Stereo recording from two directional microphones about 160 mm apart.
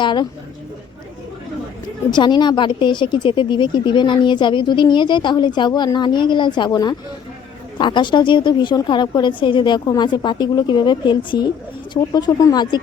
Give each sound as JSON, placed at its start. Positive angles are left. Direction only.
{"t": 0.0, "sound": "speech", "side_deg": 30}
{"t": 2.0, "sound": "speech", "side_deg": 30}